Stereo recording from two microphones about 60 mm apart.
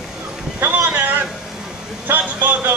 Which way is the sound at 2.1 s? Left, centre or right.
Right.